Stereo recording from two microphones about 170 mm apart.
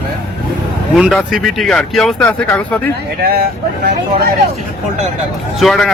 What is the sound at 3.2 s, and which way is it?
Speech, 65° right (ahead or behind).